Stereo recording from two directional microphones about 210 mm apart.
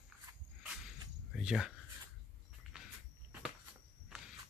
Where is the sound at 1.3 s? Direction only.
5° right (ahead or behind).